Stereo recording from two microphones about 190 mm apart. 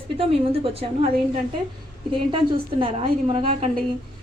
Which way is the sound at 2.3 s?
25° right (ahead or behind).